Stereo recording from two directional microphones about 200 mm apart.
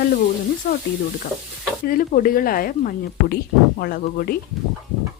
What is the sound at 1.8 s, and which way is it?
Speech, 45° left (ahead or behind).